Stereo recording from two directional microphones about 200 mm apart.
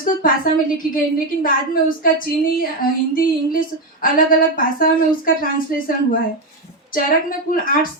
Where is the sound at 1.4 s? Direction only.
45° left (ahead or behind).